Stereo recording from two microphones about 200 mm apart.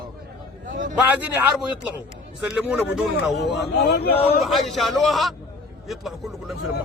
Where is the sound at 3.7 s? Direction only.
55° left (ahead or behind).